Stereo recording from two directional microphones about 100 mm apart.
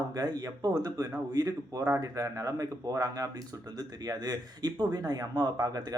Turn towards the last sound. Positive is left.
turn(degrees=-40)  # may be behind; listen again after turning